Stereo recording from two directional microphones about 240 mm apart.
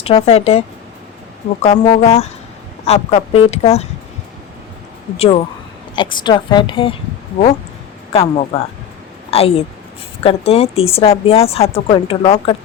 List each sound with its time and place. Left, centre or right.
0.0 s a woman's voice: left
1.6 s a woman's voice: left
5.1 s a woman's voice: left
8.1 s a woman's voice: left